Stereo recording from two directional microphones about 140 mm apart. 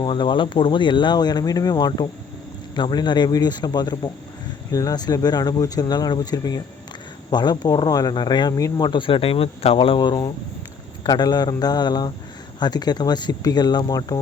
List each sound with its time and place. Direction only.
0.0 s speech: 35° left (ahead or behind)